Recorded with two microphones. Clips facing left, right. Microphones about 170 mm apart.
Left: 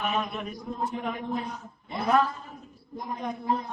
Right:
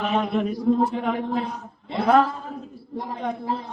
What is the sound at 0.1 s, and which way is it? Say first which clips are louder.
A woman's voice: right 8 dB; 85° right.